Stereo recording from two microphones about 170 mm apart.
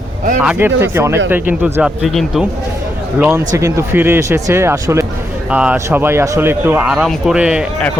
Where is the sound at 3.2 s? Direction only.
15° right (ahead or behind).